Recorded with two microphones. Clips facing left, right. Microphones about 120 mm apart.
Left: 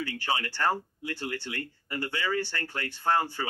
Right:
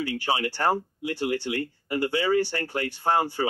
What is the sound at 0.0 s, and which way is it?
Speech, 35° right (ahead or behind).